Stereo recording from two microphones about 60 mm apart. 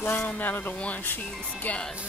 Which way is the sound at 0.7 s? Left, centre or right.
Left.